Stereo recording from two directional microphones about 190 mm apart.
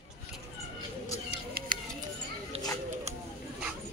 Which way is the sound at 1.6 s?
55° right (ahead or behind).